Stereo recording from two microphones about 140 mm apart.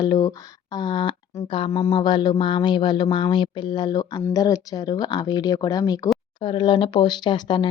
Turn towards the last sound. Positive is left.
turn(degrees=35)  # may be behind; listen again after turning